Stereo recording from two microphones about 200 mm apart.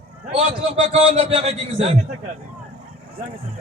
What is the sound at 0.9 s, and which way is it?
A man's voice, 30° right (ahead or behind).